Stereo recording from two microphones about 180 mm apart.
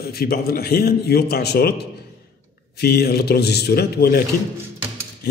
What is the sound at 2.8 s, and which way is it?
A man's voice, 60° left (ahead or behind).